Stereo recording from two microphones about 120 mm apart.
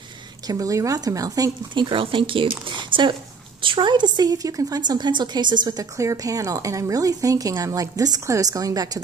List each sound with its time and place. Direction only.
0.5 s a woman's voice: 30° right (ahead or behind); by 2.5 s 45° right (ahead or behind)
2.7 s a sound: 40° right (ahead or behind)
3.6 s a woman's voice: 40° right (ahead or behind)